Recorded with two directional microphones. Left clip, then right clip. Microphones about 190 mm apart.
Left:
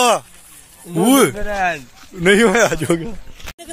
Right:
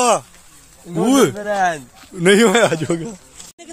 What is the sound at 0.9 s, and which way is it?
Speech, 5° left (ahead or behind).